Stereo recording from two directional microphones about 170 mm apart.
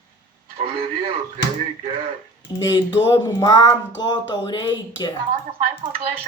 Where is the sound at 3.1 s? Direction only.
20° left (ahead or behind).